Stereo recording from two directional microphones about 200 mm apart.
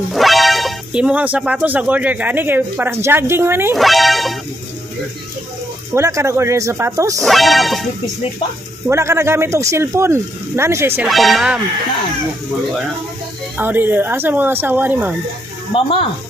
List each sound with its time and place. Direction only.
0.1 s speech: centre (ahead or behind)
3.7 s speech: centre (ahead or behind)
5.9 s speech: 15° right (ahead or behind)
7.2 s speech: centre (ahead or behind)
8.8 s speech: 15° right (ahead or behind)
11.1 s speech: centre (ahead or behind)
13.6 s speech: 10° right (ahead or behind)
15.7 s speech: 25° left (ahead or behind)